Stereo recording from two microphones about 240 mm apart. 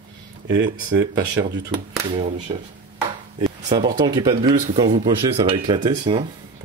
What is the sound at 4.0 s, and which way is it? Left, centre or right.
Speech, centre.